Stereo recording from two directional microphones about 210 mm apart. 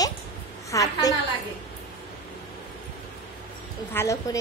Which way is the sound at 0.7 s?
15° left (ahead or behind).